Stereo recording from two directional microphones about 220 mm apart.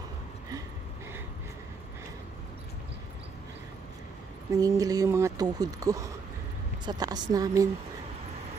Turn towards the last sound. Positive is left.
turn(degrees=-15)  # may be behind; listen again after turning